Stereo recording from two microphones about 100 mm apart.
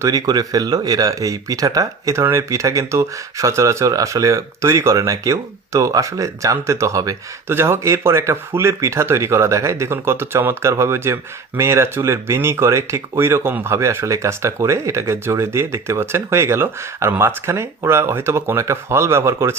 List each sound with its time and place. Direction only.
0.0 s speech: 40° right (ahead or behind)
7.4 s speech: 25° right (ahead or behind)